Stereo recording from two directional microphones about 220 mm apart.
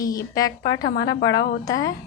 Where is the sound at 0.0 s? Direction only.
15° left (ahead or behind).